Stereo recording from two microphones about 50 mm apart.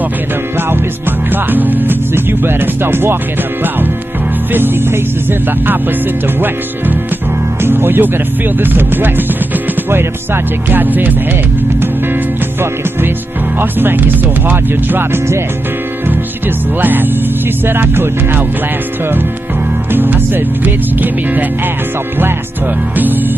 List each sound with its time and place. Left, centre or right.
1.3 s speech: right
4.5 s speech: right
7.6 s speech: right
13.6 s speech: right
16.8 s speech: right
19.9 s speech: right